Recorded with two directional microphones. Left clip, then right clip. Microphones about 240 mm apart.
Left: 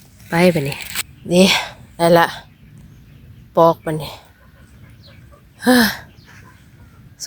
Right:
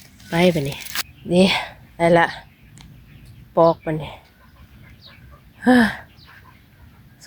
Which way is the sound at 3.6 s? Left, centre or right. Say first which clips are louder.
Left 3 dB; centre.